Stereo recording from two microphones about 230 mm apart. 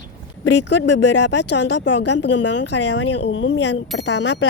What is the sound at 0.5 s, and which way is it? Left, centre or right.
Speech, left.